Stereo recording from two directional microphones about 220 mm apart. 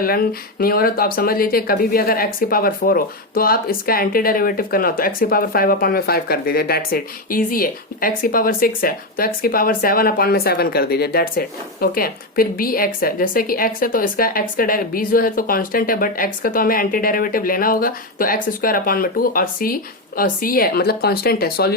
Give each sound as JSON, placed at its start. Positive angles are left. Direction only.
{"t": 0.0, "sound": "speech", "side_deg": 40}